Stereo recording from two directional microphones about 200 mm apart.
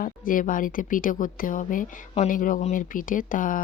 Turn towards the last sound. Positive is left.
turn(degrees=45)  # may be behind; listen again after turning